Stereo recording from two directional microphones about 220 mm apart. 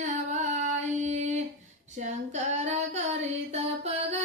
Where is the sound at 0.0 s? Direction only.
30° right (ahead or behind).